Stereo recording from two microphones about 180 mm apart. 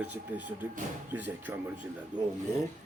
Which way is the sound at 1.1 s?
10° right (ahead or behind).